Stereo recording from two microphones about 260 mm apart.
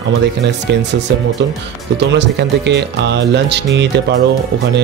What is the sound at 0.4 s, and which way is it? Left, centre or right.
Speech, right.